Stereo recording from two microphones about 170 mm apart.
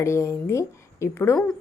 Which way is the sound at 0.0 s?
15° left (ahead or behind).